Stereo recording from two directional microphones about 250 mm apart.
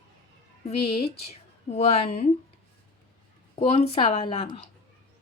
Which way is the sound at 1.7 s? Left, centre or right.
Left.